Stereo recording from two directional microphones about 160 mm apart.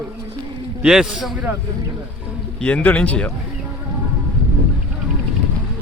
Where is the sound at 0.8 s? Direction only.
5° right (ahead or behind).